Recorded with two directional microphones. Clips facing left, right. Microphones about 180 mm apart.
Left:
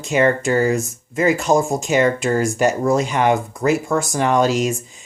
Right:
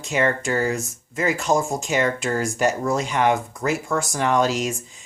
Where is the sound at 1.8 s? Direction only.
15° left (ahead or behind).